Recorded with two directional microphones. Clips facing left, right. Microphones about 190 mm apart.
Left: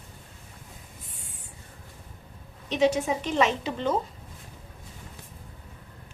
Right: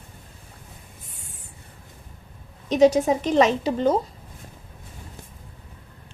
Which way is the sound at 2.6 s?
40° right (ahead or behind).